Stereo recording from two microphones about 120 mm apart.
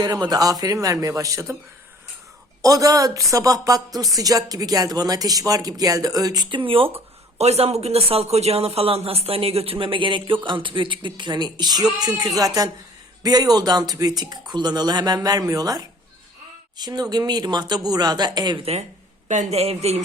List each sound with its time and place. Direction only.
0.0 s a woman's voice: 35° right (ahead or behind)
2.6 s a woman's voice: 30° right (ahead or behind); by 6.9 s 50° right (ahead or behind)
7.3 s a woman's voice: 65° right (ahead or behind); by 18.6 s 35° right (ahead or behind)
18.6 s a man's voice: 60° right (ahead or behind)
19.3 s a man's voice: 70° right (ahead or behind)